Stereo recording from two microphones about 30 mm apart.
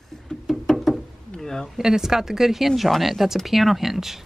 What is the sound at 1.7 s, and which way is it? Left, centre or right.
Speech, centre.